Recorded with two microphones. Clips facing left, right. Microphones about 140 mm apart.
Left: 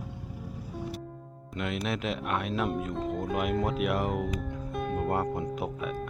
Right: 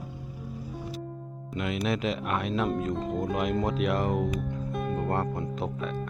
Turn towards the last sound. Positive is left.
turn(degrees=10)  # may be behind; listen again after turning